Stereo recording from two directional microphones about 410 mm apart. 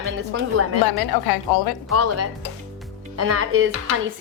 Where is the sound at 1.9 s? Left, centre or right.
Right.